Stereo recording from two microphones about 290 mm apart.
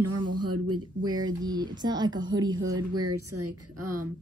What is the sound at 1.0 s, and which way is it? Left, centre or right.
Speech, centre.